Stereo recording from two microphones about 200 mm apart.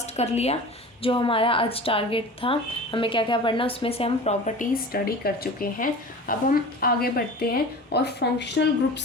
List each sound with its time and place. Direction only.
0.2 s speech: 30° left (ahead or behind); by 8.6 s 55° left (ahead or behind)